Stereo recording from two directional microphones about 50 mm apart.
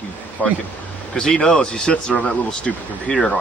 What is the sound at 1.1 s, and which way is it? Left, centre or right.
Speech, centre.